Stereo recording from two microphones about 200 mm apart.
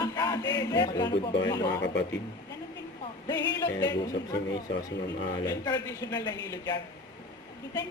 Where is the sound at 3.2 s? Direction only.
20° left (ahead or behind).